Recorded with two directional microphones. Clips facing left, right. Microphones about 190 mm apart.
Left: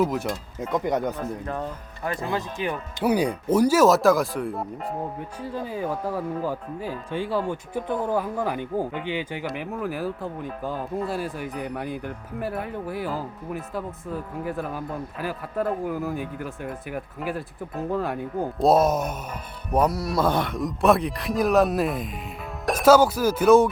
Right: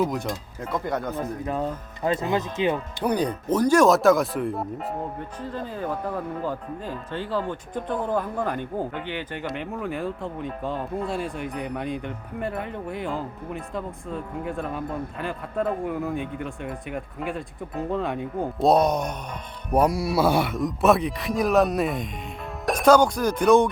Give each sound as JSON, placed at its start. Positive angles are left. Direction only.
{"t": 0.0, "sound": "speech", "side_deg": 5}
{"t": 0.7, "sound": "speech", "side_deg": 15}
{"t": 2.0, "sound": "speech", "side_deg": -20}
{"t": 3.0, "sound": "speech", "side_deg": 10}
{"t": 5.4, "sound": "speech", "side_deg": 10}
{"t": 19.7, "sound": "speech", "side_deg": -10}